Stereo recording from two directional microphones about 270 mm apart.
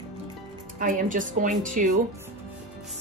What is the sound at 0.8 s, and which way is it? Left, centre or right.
A woman's voice, right.